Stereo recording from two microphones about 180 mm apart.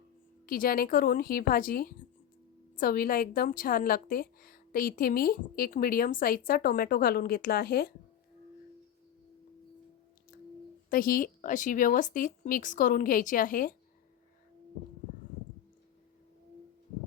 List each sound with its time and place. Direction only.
0.4 s a woman's voice: 50° left (ahead or behind)
10.8 s a woman's voice: 50° left (ahead or behind)